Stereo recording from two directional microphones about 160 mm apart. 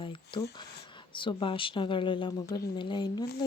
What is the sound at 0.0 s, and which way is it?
A woman's voice, 30° left (ahead or behind).